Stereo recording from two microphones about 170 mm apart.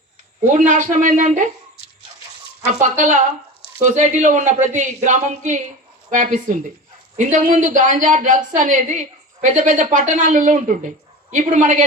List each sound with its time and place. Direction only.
0.6 s a woman's voice: 50° right (ahead or behind)
2.8 s a woman's voice: 45° right (ahead or behind)